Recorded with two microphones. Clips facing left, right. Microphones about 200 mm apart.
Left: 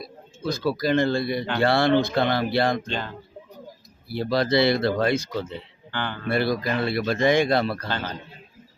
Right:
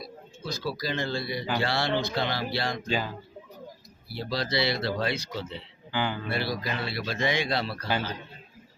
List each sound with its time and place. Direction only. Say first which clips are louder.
0.0 s a man's voice: left 7 dB; 55° left (ahead or behind)
2.8 s speech: right 1 dB; 5° right (ahead or behind)
4.1 s a man's voice: left 8 dB; 55° left (ahead or behind)
5.9 s speech: right 1 dB; 10° right (ahead or behind)
6.2 s a man's voice: left 7 dB; 50° left (ahead or behind)